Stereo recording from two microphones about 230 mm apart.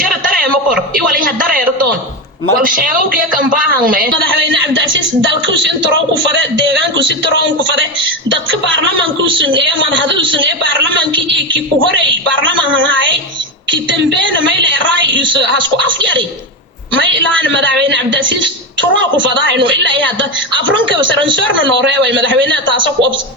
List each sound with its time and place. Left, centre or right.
2.6 s a woman's voice: right
4.4 s a woman's voice: right
8.3 s a woman's voice: right
21.8 s a woman's voice: right